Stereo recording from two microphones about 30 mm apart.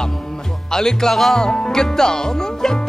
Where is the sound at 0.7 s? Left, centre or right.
Centre.